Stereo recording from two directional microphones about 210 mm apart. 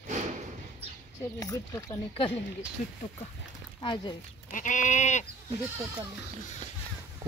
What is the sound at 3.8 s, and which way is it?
Speech, 20° left (ahead or behind).